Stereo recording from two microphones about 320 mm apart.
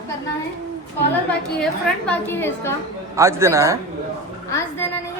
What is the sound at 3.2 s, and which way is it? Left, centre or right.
Speech, centre.